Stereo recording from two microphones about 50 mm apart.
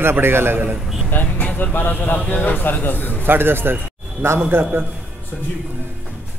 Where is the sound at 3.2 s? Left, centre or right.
Right.